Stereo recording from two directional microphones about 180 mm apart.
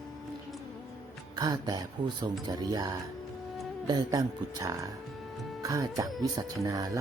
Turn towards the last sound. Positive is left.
turn(degrees=-20)  # may be behind; listen again after turning